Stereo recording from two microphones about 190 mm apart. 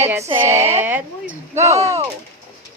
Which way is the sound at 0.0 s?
15° right (ahead or behind).